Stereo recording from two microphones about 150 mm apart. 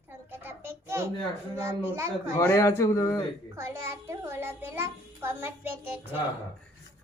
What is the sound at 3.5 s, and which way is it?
A child's voice, 20° right (ahead or behind).